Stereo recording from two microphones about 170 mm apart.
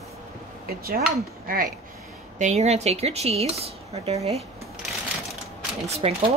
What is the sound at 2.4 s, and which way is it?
Speech, 40° right (ahead or behind).